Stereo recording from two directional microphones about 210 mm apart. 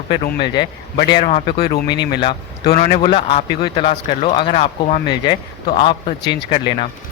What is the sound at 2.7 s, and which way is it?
A man's voice, 40° left (ahead or behind).